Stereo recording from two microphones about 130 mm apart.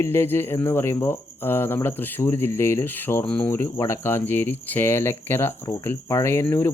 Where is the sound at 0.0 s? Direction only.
15° left (ahead or behind).